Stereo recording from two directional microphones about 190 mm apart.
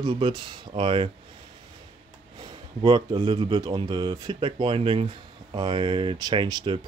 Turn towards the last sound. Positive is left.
turn(degrees=-25)  # may be behind; listen again after turning